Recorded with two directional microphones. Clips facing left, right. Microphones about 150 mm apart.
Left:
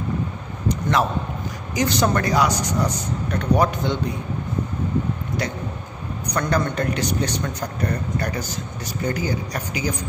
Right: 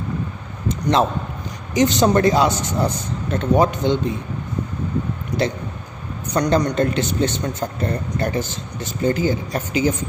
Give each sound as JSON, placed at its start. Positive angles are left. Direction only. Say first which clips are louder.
{"t": 0.7, "sound": "a man's voice", "louder": "right 3 dB", "side_deg": -25}
{"t": 5.3, "sound": "a sound", "louder": "right 7 dB", "side_deg": 0}
{"t": 6.2, "sound": "a man's voice", "louder": "right 4 dB", "side_deg": -25}